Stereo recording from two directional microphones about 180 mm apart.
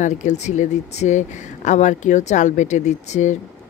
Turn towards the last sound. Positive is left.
turn(degrees=40)  # may be behind; listen again after turning